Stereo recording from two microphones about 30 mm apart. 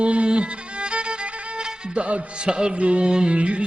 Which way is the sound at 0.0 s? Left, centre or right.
Right.